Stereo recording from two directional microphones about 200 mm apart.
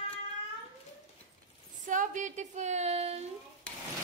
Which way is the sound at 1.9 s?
40° right (ahead or behind).